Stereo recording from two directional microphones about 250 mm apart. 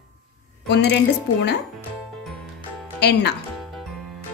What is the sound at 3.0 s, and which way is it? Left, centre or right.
Speech, left.